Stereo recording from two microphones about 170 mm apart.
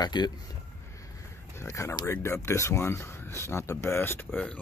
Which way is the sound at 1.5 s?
15° left (ahead or behind).